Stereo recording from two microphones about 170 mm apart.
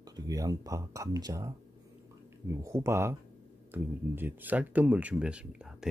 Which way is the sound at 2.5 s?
15° right (ahead or behind).